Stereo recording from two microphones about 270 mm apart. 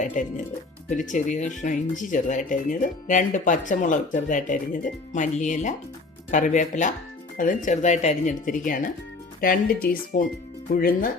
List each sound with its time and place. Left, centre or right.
0.0 s speech: left